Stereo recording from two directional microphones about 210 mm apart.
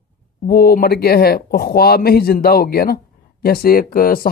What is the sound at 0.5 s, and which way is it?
Speech, 45° left (ahead or behind).